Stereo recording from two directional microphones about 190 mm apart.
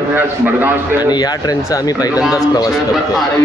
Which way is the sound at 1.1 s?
20° left (ahead or behind).